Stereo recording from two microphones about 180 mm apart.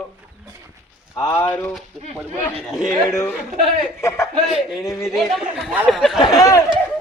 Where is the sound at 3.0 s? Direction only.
15° left (ahead or behind).